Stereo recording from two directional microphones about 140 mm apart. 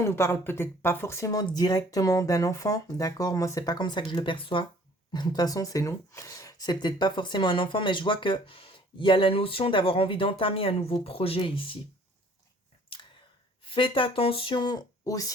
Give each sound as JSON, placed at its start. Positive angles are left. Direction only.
{"t": 0.0, "sound": "speech", "side_deg": 20}
{"t": 13.7, "sound": "speech", "side_deg": 40}